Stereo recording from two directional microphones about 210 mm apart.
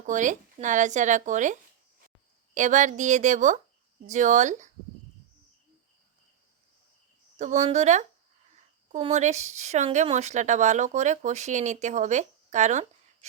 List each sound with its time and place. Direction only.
0.0 s speech: 35° right (ahead or behind)
2.6 s speech: 35° right (ahead or behind)
7.3 s speech: 35° right (ahead or behind)